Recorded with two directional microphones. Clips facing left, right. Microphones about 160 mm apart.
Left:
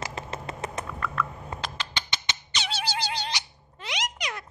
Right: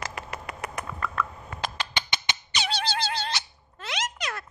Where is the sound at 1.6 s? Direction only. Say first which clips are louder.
Right 6 dB; 10° right (ahead or behind).